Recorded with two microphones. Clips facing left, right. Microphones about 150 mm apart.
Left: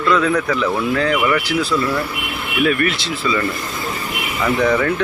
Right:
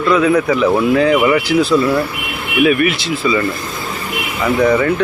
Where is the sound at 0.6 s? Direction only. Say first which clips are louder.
Right 6 dB; 15° right (ahead or behind).